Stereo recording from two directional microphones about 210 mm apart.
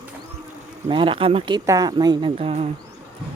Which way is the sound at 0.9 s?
25° right (ahead or behind).